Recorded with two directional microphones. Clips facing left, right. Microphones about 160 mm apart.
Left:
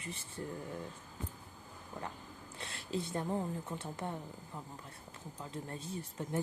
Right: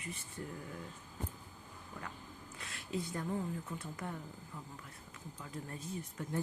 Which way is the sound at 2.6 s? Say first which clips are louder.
Left 2 dB; 30° left (ahead or behind).